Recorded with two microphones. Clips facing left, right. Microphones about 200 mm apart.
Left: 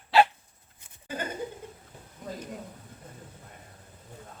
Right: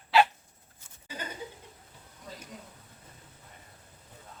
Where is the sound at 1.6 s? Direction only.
50° left (ahead or behind).